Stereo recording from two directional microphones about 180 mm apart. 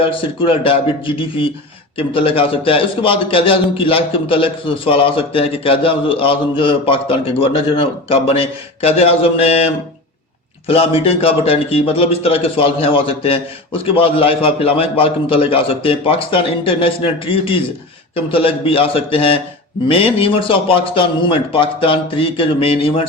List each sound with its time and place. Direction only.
0.0 s a man's voice: 30° left (ahead or behind)